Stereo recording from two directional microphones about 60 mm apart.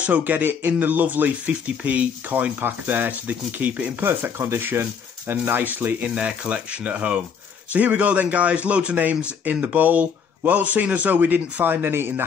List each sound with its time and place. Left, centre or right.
0.0 s a man's voice: right
4.0 s speech: right
6.1 s a man's voice: centre; by 12.3 s right